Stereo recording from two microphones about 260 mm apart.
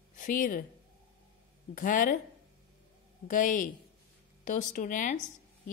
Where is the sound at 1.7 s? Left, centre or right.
Left.